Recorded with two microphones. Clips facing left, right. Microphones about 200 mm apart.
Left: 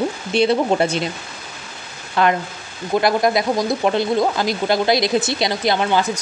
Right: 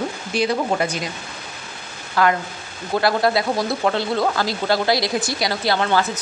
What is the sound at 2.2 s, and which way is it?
A woman's voice, 20° left (ahead or behind).